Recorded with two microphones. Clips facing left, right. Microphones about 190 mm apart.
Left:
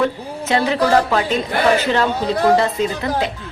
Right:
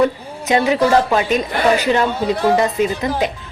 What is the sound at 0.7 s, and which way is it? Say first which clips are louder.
A man's voice: right 1 dB; 15° right (ahead or behind).